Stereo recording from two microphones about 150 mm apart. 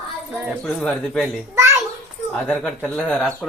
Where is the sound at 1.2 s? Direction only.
20° right (ahead or behind).